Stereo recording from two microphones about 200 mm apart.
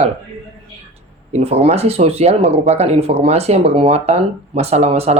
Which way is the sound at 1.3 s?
30° right (ahead or behind).